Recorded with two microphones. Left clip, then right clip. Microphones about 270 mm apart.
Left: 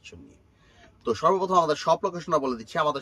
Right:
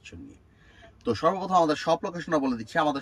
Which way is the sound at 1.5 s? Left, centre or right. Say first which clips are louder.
Left 1 dB; centre.